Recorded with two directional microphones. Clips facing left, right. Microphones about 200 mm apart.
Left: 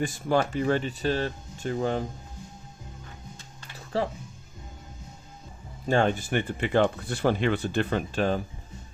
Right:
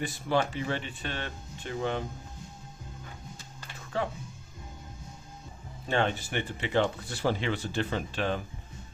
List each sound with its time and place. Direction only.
0.0 s speech: 45° left (ahead or behind)
3.9 s speech: 35° left (ahead or behind)
5.9 s speech: 45° left (ahead or behind)